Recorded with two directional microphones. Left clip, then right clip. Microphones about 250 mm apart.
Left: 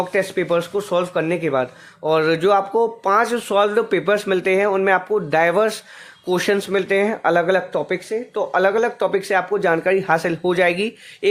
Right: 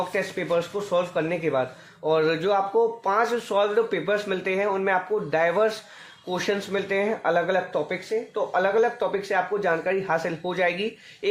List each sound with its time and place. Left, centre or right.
0.1 s speech: left